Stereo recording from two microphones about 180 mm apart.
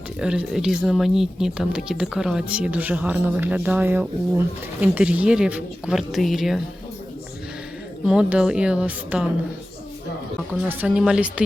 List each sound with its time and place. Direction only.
0.2 s speech: 5° right (ahead or behind)
8.0 s speech: 5° right (ahead or behind)
10.7 s speech: 10° right (ahead or behind)